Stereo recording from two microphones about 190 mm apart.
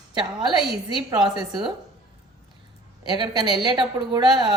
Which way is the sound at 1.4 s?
Centre (ahead or behind).